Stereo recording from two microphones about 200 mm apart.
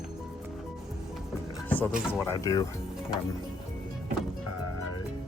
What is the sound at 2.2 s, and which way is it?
Speech, 15° left (ahead or behind).